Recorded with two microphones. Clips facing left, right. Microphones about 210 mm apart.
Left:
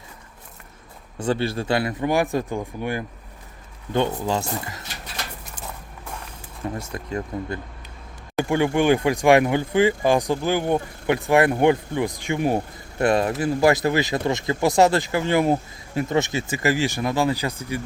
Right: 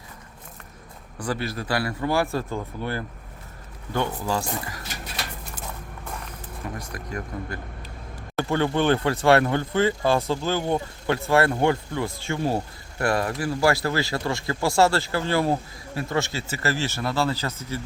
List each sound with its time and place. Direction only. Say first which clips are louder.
1.2 s speech: left 5 dB; 25° left (ahead or behind)
6.7 s speech: left 5 dB; 25° left (ahead or behind)